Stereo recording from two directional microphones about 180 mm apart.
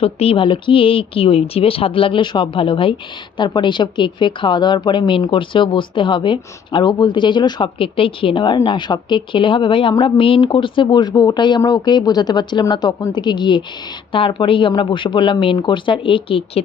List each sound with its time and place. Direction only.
0.0 s speech: 35° left (ahead or behind)